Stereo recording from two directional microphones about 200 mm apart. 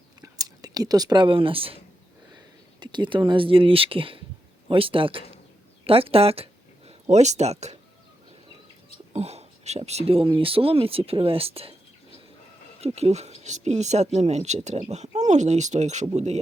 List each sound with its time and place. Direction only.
0.2 s speech: 20° right (ahead or behind)
2.8 s speech: 25° right (ahead or behind)
9.1 s speech: 30° right (ahead or behind)
12.8 s speech: 30° right (ahead or behind)